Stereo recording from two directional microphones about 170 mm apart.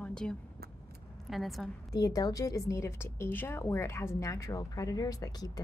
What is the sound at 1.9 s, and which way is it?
A woman's voice, 20° left (ahead or behind).